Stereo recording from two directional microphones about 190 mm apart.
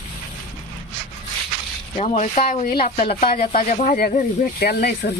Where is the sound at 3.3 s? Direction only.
45° left (ahead or behind).